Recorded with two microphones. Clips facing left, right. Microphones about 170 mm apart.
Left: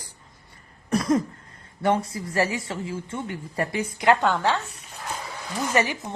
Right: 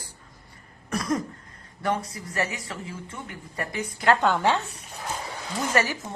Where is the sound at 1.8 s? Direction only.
25° left (ahead or behind).